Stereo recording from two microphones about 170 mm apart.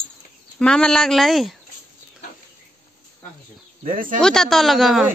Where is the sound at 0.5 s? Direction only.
5° left (ahead or behind).